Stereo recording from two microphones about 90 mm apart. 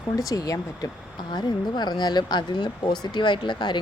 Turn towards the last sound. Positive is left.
turn(degrees=55)  # may be behind; listen again after turning